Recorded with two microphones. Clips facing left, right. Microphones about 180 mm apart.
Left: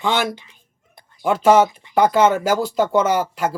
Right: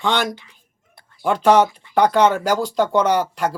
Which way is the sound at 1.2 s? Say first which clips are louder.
Left 1 dB; 5° left (ahead or behind).